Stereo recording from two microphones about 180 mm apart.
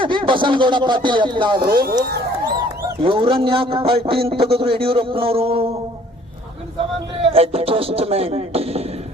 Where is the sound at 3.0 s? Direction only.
30° right (ahead or behind).